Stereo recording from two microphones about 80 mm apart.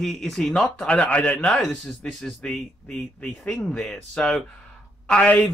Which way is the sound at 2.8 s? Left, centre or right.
Left.